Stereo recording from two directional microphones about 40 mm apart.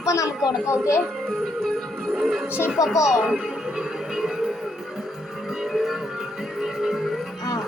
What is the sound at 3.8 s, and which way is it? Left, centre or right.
Music, centre.